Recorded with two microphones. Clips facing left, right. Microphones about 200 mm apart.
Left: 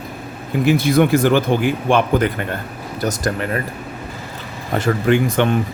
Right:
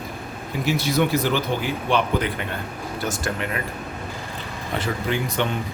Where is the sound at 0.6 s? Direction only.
55° left (ahead or behind).